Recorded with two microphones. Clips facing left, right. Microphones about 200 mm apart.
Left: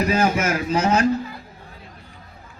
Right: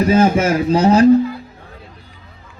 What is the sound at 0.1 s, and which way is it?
Speech, 30° right (ahead or behind).